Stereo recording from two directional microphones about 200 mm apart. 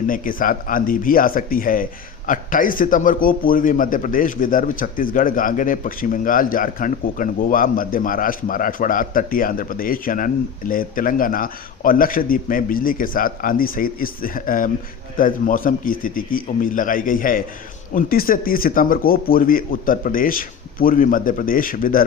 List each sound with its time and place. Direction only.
0.1 s speech: 45° left (ahead or behind)